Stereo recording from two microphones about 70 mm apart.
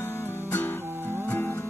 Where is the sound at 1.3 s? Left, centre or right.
Left.